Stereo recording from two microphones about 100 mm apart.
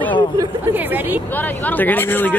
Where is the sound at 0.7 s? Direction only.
20° right (ahead or behind).